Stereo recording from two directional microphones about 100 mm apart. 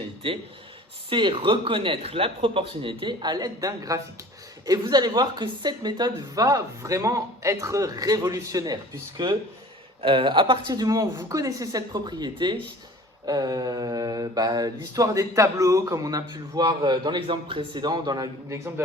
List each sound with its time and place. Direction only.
0.2 s a man's voice: 65° right (ahead or behind); by 4.0 s 35° right (ahead or behind)
4.6 s mantra: 40° right (ahead or behind)
10.0 s a man's voice: 60° right (ahead or behind)
10.7 s mantra: 35° right (ahead or behind)
11.3 s speech: 35° right (ahead or behind)
13.2 s mantra: 40° right (ahead or behind)